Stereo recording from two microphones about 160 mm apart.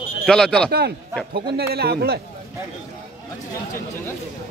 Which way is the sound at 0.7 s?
90° right.